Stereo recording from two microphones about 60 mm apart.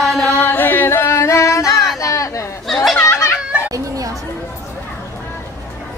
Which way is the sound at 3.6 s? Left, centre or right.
Right.